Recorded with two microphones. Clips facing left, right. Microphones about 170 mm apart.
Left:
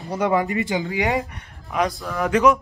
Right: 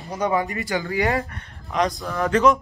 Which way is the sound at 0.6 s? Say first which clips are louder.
Even; 20° left (ahead or behind).